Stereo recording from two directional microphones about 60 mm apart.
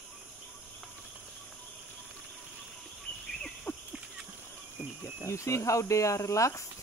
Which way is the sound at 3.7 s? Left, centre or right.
Left.